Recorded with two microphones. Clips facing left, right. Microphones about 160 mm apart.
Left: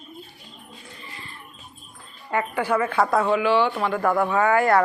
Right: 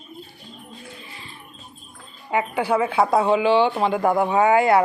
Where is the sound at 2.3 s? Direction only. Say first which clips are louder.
Right 2 dB; 10° right (ahead or behind).